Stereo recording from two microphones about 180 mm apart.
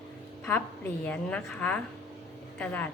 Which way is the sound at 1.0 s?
5° left (ahead or behind).